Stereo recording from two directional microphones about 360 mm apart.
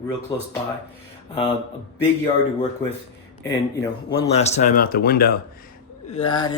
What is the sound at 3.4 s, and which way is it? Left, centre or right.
Speech, centre.